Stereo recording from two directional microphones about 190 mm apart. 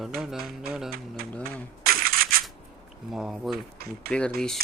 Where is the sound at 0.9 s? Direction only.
55° right (ahead or behind).